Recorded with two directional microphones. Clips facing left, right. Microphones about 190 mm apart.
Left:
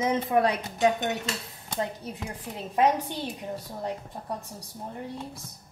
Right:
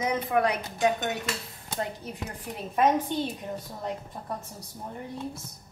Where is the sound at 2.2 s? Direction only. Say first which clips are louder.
Right 1 dB; 15° left (ahead or behind).